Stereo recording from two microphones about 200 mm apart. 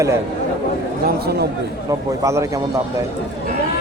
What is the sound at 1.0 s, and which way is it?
Speech, 50° right (ahead or behind).